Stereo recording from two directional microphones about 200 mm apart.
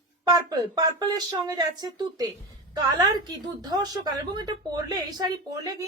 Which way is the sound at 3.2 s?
20° right (ahead or behind).